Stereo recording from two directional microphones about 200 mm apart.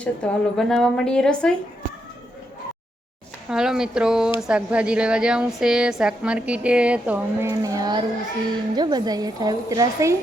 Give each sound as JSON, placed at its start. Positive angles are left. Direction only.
{"t": 0.0, "sound": "a woman's voice", "side_deg": 5}
{"t": 3.5, "sound": "a woman's voice", "side_deg": -5}